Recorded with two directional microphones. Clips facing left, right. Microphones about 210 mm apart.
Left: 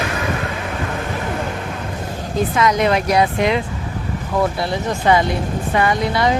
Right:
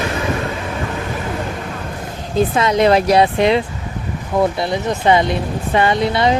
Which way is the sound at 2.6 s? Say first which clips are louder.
Right 3 dB; 30° right (ahead or behind).